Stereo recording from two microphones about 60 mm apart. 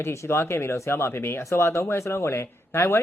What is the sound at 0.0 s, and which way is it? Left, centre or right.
Speech, left.